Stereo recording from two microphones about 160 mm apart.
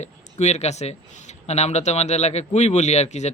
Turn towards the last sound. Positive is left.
turn(degrees=45)  # may be behind; listen again after turning